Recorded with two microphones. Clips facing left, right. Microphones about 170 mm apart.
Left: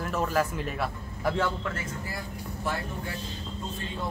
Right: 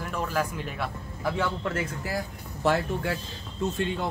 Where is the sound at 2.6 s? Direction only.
85° right.